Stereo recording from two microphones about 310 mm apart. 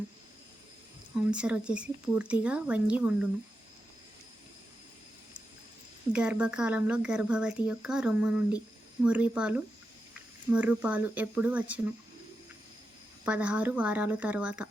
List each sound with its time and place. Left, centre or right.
1.3 s speech: centre
6.1 s speech: centre
13.2 s speech: centre